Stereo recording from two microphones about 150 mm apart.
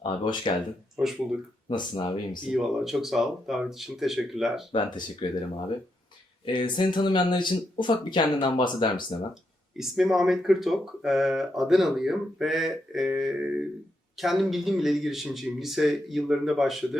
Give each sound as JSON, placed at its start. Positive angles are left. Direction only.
{"t": 0.0, "sound": "speech", "side_deg": 30}
{"t": 0.9, "sound": "speech", "side_deg": 0}
{"t": 2.5, "sound": "speech", "side_deg": 0}
{"t": 4.7, "sound": "speech", "side_deg": 30}
{"t": 9.3, "sound": "speech", "side_deg": 0}